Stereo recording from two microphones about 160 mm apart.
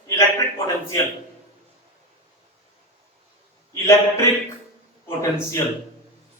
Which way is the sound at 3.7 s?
20° left (ahead or behind).